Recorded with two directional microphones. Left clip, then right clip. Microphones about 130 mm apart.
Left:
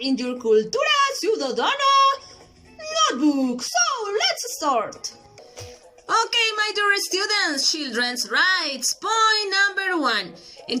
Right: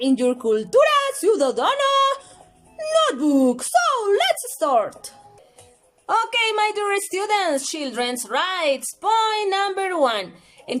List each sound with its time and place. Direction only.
0.0 s a child's voice: 40° right (ahead or behind)
6.6 s a woman's voice: 25° right (ahead or behind)